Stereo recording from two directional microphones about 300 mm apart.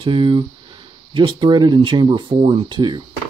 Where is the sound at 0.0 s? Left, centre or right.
Centre.